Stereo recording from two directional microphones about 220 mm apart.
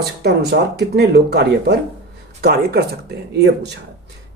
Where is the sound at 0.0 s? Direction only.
50° right (ahead or behind).